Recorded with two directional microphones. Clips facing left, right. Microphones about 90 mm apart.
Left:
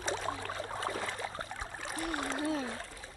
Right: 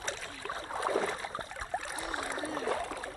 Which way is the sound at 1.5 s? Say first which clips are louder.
Right 3 dB; centre (ahead or behind).